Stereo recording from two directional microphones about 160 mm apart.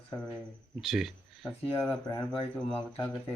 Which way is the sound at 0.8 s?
Centre (ahead or behind).